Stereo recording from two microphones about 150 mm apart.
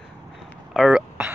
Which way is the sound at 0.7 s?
5° right (ahead or behind).